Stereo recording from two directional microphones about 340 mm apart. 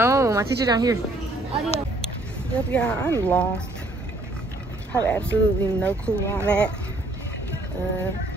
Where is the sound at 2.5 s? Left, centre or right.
Centre.